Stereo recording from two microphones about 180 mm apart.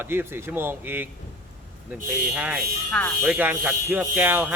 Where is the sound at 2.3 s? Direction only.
5° right (ahead or behind).